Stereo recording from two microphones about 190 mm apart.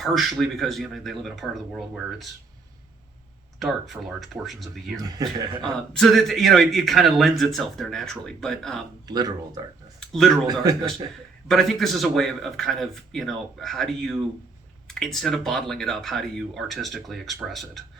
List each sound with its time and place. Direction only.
0.0 s a man's voice: centre (ahead or behind)
3.6 s a man's voice: centre (ahead or behind)
4.9 s speech: 20° right (ahead or behind)
5.6 s a man's voice: 5° left (ahead or behind)
9.0 s speech: 20° right (ahead or behind)
10.0 s speech: centre (ahead or behind)
10.4 s speech: 20° right (ahead or behind)
11.4 s a man's voice: centre (ahead or behind)